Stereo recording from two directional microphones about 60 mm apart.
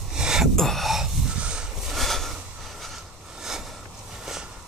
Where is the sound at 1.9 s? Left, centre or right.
Centre.